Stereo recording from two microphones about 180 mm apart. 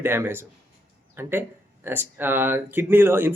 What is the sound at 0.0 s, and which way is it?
Speech, 15° right (ahead or behind).